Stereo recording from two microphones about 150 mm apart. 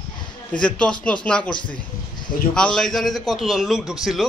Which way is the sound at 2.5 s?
5° left (ahead or behind).